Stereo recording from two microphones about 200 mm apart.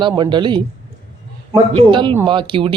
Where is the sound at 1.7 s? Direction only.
25° right (ahead or behind).